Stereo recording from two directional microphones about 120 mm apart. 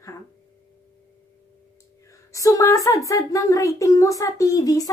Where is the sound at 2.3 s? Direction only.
30° left (ahead or behind).